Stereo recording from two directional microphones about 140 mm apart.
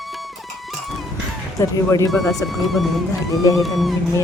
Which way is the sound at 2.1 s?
Centre (ahead or behind).